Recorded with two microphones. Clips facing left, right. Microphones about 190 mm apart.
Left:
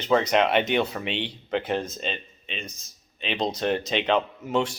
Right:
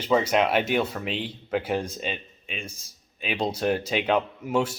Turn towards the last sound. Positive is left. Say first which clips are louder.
# even
turn(degrees=-10)  # may be behind; listen again after turning